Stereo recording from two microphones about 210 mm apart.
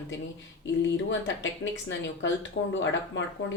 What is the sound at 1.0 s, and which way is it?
Speech, 60° left (ahead or behind).